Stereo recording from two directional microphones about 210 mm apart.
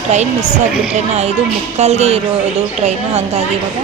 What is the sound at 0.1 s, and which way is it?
A woman's voice, 35° right (ahead or behind).